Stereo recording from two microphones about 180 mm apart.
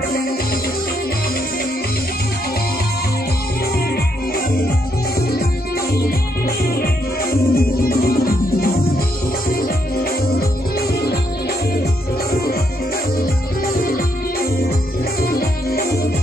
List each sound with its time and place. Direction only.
7.5 s music: 55° left (ahead or behind)
15.2 s music: 55° left (ahead or behind)